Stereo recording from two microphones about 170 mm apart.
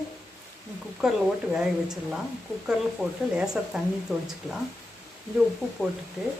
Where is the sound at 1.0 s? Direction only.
5° right (ahead or behind).